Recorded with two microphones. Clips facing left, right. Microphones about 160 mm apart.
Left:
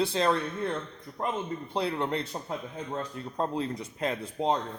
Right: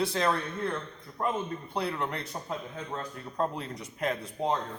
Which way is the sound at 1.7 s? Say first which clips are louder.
Left 3 dB; 25° left (ahead or behind).